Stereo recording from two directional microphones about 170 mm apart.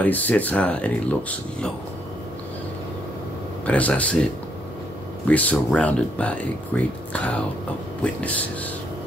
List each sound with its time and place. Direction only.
0.0 s speech: 10° left (ahead or behind)
3.6 s speech: 10° left (ahead or behind)
5.3 s speech: 10° left (ahead or behind)